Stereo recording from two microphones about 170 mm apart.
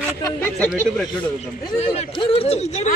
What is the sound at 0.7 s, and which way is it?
Speech, 5° right (ahead or behind).